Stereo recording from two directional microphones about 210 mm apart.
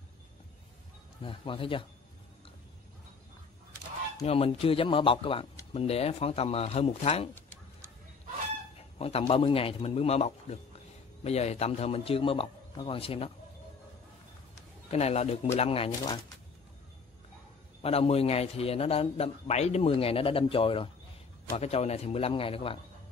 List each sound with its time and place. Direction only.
1.2 s a man's voice: 25° left (ahead or behind)
4.2 s a man's voice: 30° left (ahead or behind)
8.9 s a man's voice: 30° left (ahead or behind)
14.9 s a man's voice: 30° left (ahead or behind)
17.8 s a man's voice: 30° left (ahead or behind)